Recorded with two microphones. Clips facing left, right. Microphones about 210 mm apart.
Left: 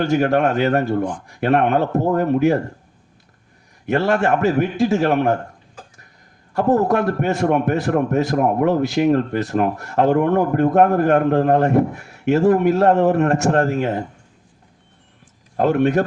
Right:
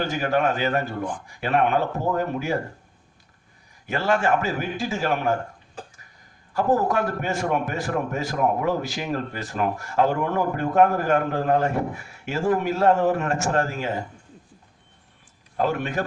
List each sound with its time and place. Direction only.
0.0 s a man's voice: 65° left (ahead or behind)
3.8 s a man's voice: 60° left (ahead or behind)
6.6 s a man's voice: 60° left (ahead or behind)
15.5 s a man's voice: 60° left (ahead or behind)